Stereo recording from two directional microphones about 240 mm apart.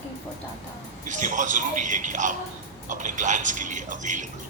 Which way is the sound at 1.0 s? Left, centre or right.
Right.